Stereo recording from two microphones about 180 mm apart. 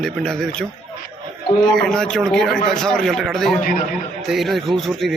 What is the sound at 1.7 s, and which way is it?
Speech, 5° left (ahead or behind).